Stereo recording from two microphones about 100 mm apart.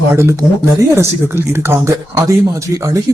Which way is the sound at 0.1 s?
25° right (ahead or behind).